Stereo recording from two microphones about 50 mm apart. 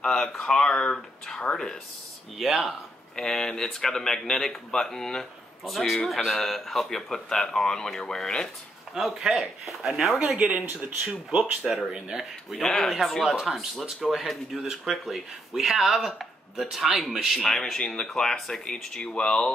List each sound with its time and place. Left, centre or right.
0.0 s speech: centre
0.6 s speech: left
2.3 s speech: centre
3.2 s speech: centre
8.9 s speech: centre
10.1 s speech: right
11.6 s speech: centre
12.6 s speech: centre
13.4 s speech: centre
17.4 s speech: centre